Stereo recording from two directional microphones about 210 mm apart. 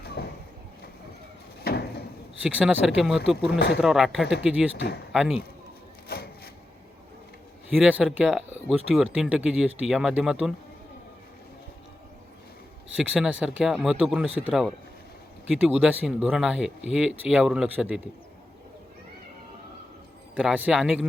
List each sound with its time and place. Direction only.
0.2 s a sound: 50° left (ahead or behind)
1.6 s a sound: 50° left (ahead or behind)
2.4 s speech: 5° right (ahead or behind)
6.1 s wood: 45° left (ahead or behind)
7.8 s speech: 5° right (ahead or behind)
13.0 s speech: 5° right (ahead or behind)
20.3 s speech: 5° right (ahead or behind)